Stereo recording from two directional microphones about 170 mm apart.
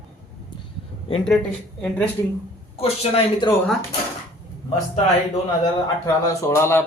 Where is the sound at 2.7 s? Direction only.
35° left (ahead or behind).